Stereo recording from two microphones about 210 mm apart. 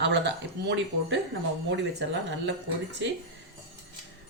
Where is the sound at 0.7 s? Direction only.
55° right (ahead or behind).